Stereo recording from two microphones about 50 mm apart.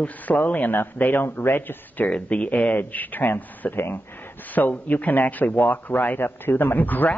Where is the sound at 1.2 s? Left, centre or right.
Left.